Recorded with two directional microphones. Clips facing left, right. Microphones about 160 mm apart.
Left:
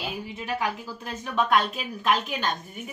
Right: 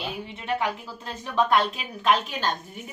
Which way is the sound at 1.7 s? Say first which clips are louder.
Right 2 dB; centre (ahead or behind).